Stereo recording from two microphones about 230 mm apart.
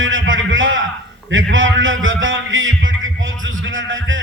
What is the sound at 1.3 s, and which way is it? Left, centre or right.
A man's voice, right.